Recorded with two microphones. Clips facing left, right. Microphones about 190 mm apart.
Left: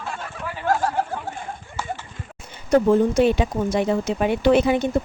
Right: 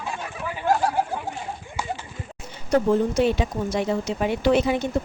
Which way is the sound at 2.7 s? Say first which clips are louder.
Left 3 dB; 55° left (ahead or behind).